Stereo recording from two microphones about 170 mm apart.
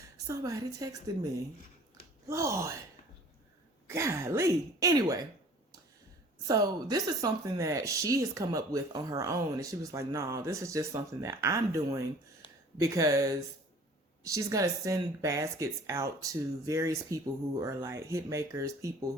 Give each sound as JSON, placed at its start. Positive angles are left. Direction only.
{"t": 0.3, "sound": "speech", "side_deg": -20}
{"t": 3.8, "sound": "speech", "side_deg": -15}
{"t": 6.5, "sound": "speech", "side_deg": -20}
{"t": 12.4, "sound": "a sound", "side_deg": 30}
{"t": 12.8, "sound": "speech", "side_deg": -20}